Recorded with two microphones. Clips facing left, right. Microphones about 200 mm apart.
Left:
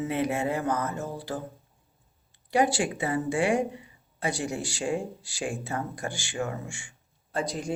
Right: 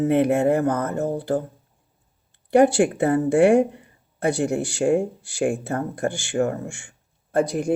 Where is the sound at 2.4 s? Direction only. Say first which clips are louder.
Right 9 dB; 55° right (ahead or behind).